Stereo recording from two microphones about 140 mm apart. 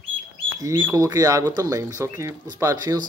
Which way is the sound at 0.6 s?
20° right (ahead or behind).